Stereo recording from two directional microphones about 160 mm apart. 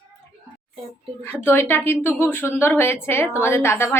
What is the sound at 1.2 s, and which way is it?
A woman's voice, 15° left (ahead or behind).